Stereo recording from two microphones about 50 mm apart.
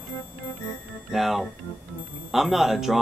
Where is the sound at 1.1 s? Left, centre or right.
Centre.